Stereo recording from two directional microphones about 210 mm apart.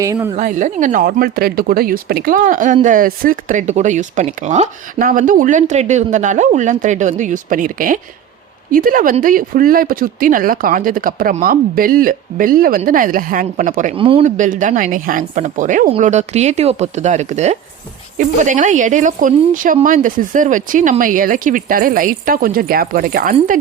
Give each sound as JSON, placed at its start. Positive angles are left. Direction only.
{"t": 0.0, "sound": "a woman's voice", "side_deg": -15}
{"t": 0.3, "sound": "speech", "side_deg": -35}
{"t": 13.9, "sound": "speech", "side_deg": -25}